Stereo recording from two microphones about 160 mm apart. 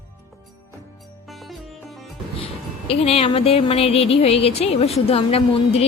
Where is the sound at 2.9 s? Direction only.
40° left (ahead or behind).